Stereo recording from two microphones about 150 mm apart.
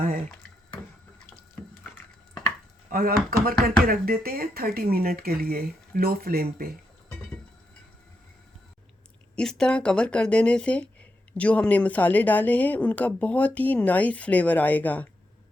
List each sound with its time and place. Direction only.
1.6 s water: 10° left (ahead or behind)
2.9 s speech: 75° right (ahead or behind)
9.3 s speech: 5° left (ahead or behind)